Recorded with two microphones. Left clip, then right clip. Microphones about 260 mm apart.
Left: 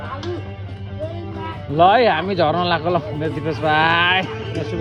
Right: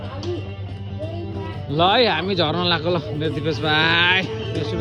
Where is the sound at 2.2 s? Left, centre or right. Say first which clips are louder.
Left 3 dB; centre.